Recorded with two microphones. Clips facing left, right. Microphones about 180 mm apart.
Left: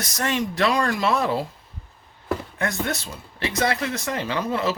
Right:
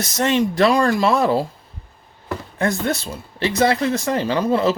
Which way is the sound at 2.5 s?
30° right (ahead or behind).